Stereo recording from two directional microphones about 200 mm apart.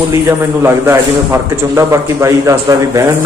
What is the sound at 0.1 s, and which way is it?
A man's voice, 15° right (ahead or behind).